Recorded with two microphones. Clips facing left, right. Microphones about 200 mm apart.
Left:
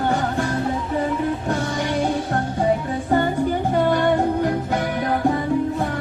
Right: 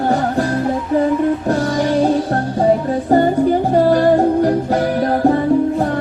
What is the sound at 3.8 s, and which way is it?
Music, 35° right (ahead or behind).